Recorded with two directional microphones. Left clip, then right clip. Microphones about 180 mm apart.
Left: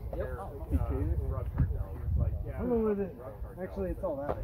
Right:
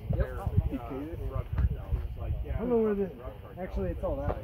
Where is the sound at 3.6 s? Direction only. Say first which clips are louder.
Right 1 dB; 40° right (ahead or behind).